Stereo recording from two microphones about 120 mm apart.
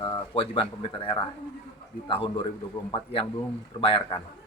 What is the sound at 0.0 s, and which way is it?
A man's voice, 45° left (ahead or behind).